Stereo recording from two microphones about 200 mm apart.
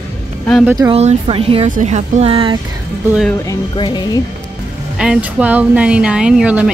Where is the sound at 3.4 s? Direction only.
20° left (ahead or behind).